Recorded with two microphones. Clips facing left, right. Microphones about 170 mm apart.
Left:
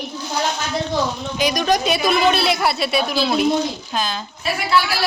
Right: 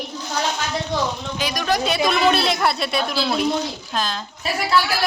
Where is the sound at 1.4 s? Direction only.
15° left (ahead or behind).